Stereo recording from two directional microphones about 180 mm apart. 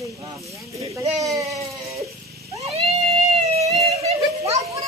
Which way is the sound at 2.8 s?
35° right (ahead or behind).